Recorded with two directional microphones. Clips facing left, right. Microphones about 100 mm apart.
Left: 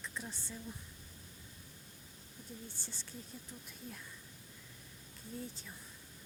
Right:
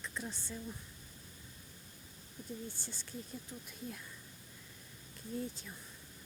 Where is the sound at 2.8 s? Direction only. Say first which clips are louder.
Right 3 dB; centre (ahead or behind).